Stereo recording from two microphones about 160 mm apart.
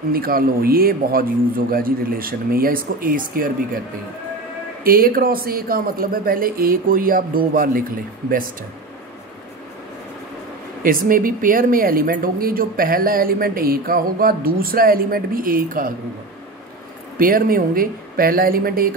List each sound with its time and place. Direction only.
0.1 s speech: 65° right (ahead or behind)
4.8 s speech: 65° right (ahead or behind)
10.8 s speech: 60° right (ahead or behind)
17.2 s speech: 65° right (ahead or behind)